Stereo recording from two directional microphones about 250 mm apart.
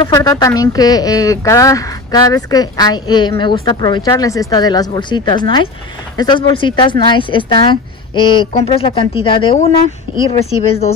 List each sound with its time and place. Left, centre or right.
0.1 s speech: centre